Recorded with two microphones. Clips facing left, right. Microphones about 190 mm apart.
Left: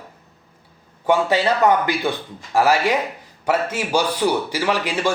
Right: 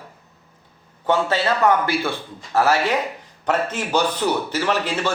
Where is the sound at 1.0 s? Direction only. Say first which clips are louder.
Left 2 dB; 15° left (ahead or behind).